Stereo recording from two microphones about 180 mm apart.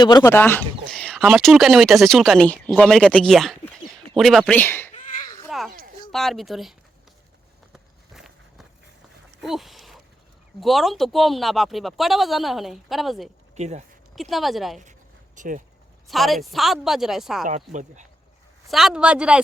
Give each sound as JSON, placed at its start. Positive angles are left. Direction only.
{"t": 0.0, "sound": "speech", "side_deg": 20}
{"t": 0.9, "sound": "speech", "side_deg": 0}
{"t": 5.5, "sound": "a sound", "side_deg": 0}
{"t": 6.1, "sound": "speech", "side_deg": 0}
{"t": 7.7, "sound": "walk", "side_deg": 0}
{"t": 9.4, "sound": "a sound", "side_deg": 0}
{"t": 10.6, "sound": "speech", "side_deg": 0}
{"t": 13.6, "sound": "speech", "side_deg": -40}
{"t": 14.2, "sound": "speech", "side_deg": 0}
{"t": 15.4, "sound": "speech", "side_deg": -45}
{"t": 16.0, "sound": "speech", "side_deg": 0}
{"t": 17.4, "sound": "speech", "side_deg": -45}
{"t": 18.7, "sound": "speech", "side_deg": 0}